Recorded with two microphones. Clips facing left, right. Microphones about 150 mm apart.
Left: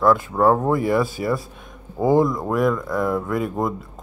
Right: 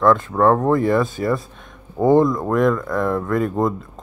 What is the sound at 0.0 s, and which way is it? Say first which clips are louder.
Speech: right 1 dB; 10° left (ahead or behind).